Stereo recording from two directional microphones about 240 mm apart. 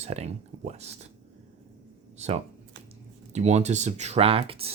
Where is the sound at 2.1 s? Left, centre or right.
Right.